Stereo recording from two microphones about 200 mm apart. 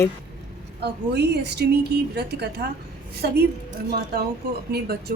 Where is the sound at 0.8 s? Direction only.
55° right (ahead or behind).